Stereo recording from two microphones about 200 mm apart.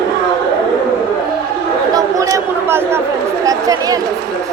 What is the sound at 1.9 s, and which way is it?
Speech, 15° right (ahead or behind).